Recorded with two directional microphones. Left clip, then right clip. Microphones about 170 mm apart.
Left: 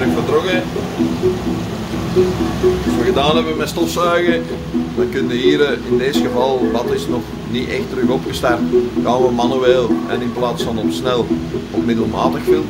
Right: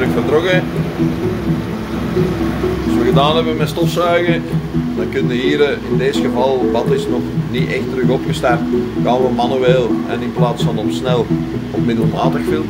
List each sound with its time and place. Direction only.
3.2 s speech: 10° left (ahead or behind)
5.4 s speech: 10° left (ahead or behind)
9.0 s speech: 10° left (ahead or behind)